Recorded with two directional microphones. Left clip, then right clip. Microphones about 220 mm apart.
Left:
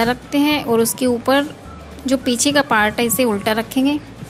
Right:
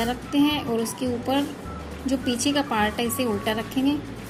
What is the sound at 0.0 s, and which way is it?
A woman's voice, 40° left (ahead or behind).